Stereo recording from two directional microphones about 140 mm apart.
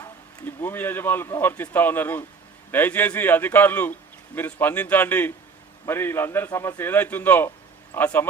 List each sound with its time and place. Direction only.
0.4 s speech: 15° left (ahead or behind)